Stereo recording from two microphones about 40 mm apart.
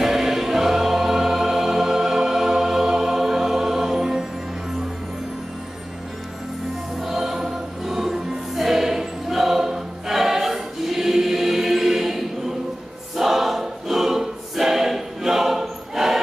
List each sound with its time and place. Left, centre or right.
0.0 s music: centre
7.0 s music: centre
13.1 s choir: centre